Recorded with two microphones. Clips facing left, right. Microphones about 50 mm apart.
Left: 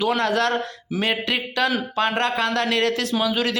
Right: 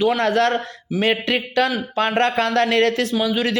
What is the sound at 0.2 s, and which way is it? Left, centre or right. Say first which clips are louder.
Speech: right 3 dB; right.